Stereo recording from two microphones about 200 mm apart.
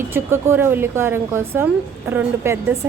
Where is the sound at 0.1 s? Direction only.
10° right (ahead or behind).